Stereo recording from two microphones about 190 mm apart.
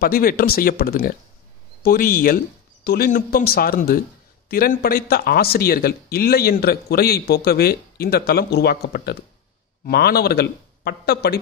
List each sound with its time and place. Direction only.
0.0 s speech: 50° left (ahead or behind)